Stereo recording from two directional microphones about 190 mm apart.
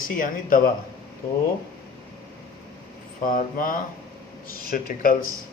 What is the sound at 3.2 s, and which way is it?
Speech, 45° left (ahead or behind).